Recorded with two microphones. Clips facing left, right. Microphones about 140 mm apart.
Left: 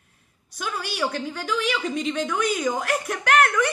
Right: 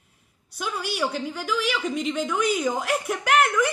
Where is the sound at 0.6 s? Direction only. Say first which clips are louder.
Even; 15° right (ahead or behind).